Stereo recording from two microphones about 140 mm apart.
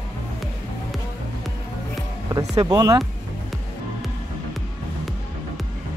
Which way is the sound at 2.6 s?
25° right (ahead or behind).